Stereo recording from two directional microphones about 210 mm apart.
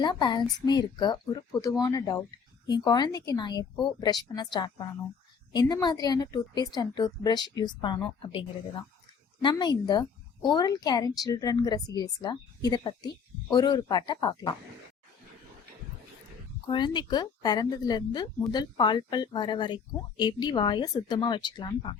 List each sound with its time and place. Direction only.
0.0 s speech: 20° left (ahead or behind)
16.6 s speech: 20° left (ahead or behind)